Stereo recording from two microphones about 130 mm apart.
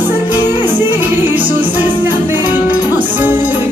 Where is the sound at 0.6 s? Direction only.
15° right (ahead or behind).